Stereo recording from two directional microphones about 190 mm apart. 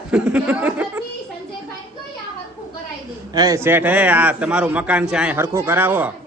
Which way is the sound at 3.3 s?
20° right (ahead or behind).